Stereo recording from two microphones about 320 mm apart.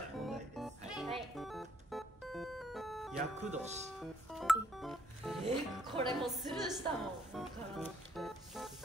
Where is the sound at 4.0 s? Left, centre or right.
Centre.